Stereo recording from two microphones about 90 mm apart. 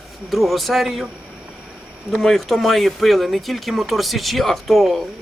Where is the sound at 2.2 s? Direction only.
Centre (ahead or behind).